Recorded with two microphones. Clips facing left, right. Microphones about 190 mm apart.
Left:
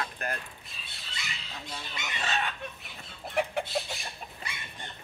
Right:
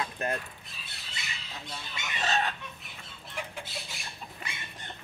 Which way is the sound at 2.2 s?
40° right (ahead or behind).